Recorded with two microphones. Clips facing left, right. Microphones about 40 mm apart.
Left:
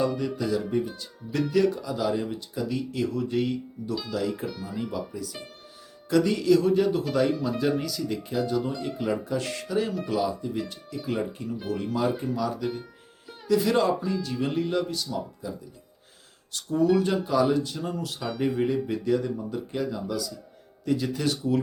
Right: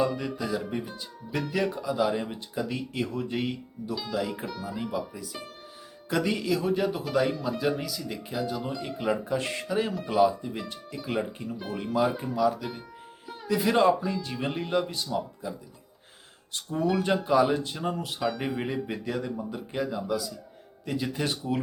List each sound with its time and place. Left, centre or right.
0.0 s speech: centre
3.9 s speech: centre
4.4 s speech: centre
6.1 s speech: right; by 9.0 s centre
9.0 s speech: centre
11.3 s speech: right
11.7 s speech: centre
13.5 s speech: centre
18.2 s speech: centre